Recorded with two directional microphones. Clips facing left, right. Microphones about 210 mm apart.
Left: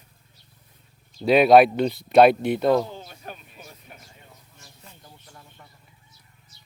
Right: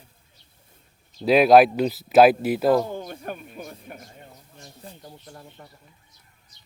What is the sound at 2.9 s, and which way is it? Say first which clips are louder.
Speech: right 7 dB; 50° right (ahead or behind).